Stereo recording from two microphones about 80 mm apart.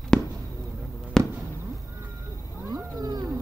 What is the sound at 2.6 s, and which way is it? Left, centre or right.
Wild animals, right.